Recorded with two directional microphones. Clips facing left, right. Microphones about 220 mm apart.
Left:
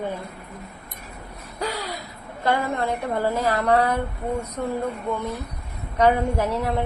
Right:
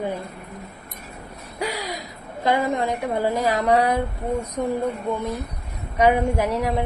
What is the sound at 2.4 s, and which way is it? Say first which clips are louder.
A woman's voice: right 2 dB; 15° right (ahead or behind).